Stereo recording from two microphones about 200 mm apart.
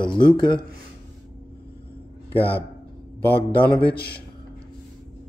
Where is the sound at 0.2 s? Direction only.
25° left (ahead or behind).